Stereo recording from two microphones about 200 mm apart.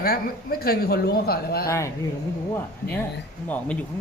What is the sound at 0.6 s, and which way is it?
Speech, 50° left (ahead or behind).